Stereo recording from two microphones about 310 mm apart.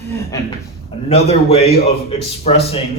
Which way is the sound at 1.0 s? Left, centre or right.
Centre.